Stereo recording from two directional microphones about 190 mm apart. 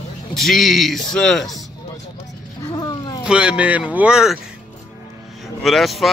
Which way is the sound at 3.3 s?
5° right (ahead or behind).